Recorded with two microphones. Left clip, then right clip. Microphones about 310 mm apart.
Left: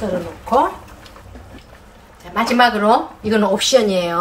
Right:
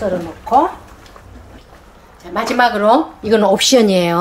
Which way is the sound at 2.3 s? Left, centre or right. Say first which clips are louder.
Even; right.